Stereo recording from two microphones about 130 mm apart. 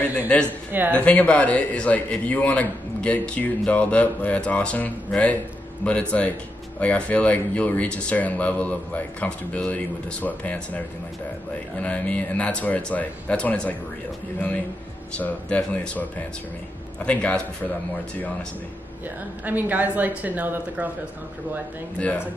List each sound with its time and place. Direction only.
0.3 s a man's voice: 10° left (ahead or behind)
0.7 s speech: 15° right (ahead or behind)
0.9 s a man's voice: 10° left (ahead or behind)
11.8 s a man's voice: 10° left (ahead or behind)
15.1 s a man's voice: 10° left (ahead or behind)
19.4 s a woman's voice: 15° right (ahead or behind)
21.9 s a man's voice: 10° left (ahead or behind)